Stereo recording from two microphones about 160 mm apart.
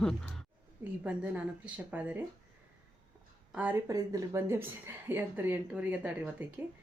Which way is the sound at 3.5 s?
10° right (ahead or behind).